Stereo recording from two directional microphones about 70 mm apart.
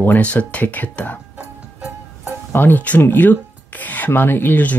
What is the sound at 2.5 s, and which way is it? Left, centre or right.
Speech, left.